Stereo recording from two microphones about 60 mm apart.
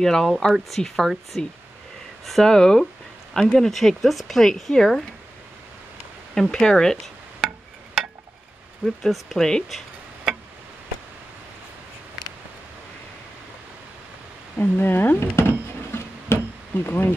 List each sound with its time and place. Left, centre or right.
0.0 s speech: centre
6.3 s speech: centre
8.8 s speech: centre
14.6 s speech: left
16.3 s a sound: left
16.8 s speech: left